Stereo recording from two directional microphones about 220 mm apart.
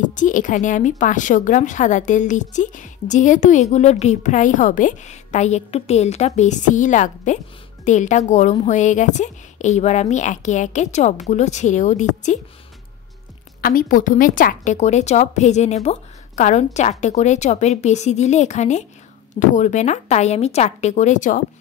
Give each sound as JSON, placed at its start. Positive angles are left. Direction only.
{"t": 0.1, "sound": "a woman's voice", "side_deg": 35}
{"t": 13.6, "sound": "a woman's voice", "side_deg": 40}